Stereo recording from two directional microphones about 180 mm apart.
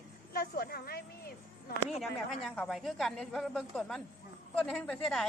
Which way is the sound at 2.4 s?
Centre (ahead or behind).